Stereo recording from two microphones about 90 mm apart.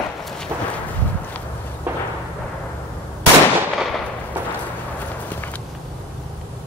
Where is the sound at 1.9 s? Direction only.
20° right (ahead or behind).